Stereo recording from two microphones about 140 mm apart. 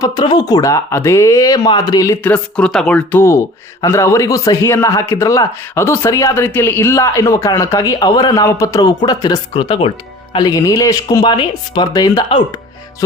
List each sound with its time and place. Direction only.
0.0 s speech: 30° left (ahead or behind)
2.2 s speech: 10° left (ahead or behind); by 9.9 s 40° left (ahead or behind)
10.3 s speech: 25° left (ahead or behind)